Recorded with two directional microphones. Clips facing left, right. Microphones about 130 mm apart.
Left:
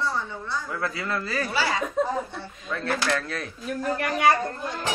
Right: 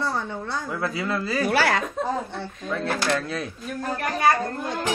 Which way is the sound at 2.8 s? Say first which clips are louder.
Right 1 dB; 20° right (ahead or behind).